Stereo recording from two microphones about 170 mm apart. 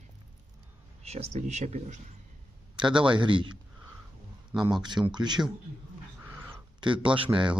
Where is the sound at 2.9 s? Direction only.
5° right (ahead or behind).